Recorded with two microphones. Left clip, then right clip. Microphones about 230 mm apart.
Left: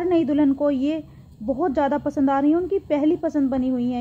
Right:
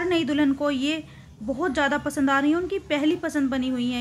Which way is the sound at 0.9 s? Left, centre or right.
Right.